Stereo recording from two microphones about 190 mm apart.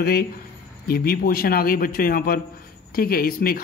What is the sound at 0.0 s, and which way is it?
A man's voice, 55° left (ahead or behind).